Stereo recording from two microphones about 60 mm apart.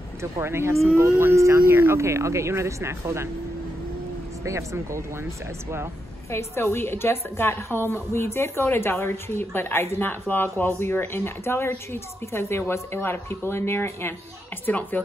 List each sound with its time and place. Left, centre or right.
0.2 s speech: right
1.7 s speech: right
4.5 s speech: right
6.3 s speech: left
14.7 s speech: left